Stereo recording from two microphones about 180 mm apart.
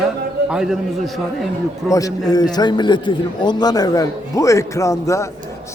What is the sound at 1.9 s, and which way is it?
A man's voice, 20° left (ahead or behind).